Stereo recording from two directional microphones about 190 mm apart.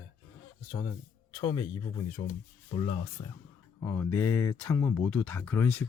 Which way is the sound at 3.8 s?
10° left (ahead or behind).